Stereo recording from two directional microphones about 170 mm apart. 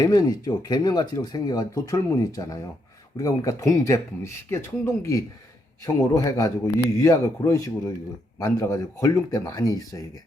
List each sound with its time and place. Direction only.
0.0 s speech: 20° left (ahead or behind)